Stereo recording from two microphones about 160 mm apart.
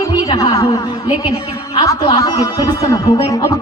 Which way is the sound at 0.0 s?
25° left (ahead or behind).